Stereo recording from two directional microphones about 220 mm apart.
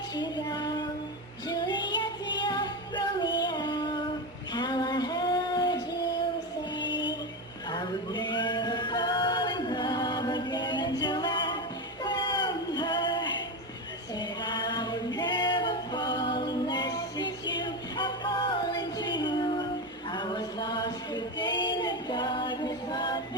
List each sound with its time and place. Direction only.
0.1 s female singing: 20° left (ahead or behind)
1.5 s music: 20° left (ahead or behind)
4.5 s female singing: 20° left (ahead or behind)
7.7 s chant: 20° left (ahead or behind)
11.0 s a capella: 20° left (ahead or behind)
12.0 s a sound: 20° left (ahead or behind)
14.2 s singing: 20° left (ahead or behind)
17.6 s music: 20° left (ahead or behind)
20.1 s a sound: 20° left (ahead or behind)